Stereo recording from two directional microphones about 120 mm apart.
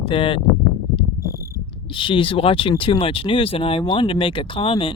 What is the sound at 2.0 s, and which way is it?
Speech, 45° left (ahead or behind).